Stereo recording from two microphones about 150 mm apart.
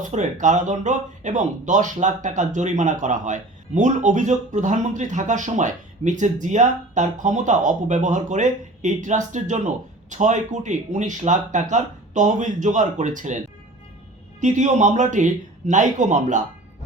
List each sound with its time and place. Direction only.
0.0 s speech: 55° right (ahead or behind)
14.4 s speech: 55° right (ahead or behind)